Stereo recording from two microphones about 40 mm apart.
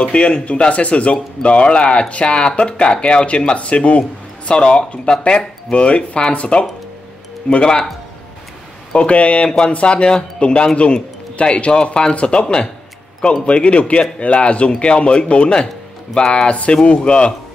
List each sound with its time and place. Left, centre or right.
0.0 s speech: left
7.6 s speech: centre
8.9 s speech: left